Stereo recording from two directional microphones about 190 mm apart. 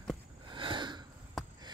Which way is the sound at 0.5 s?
25° right (ahead or behind).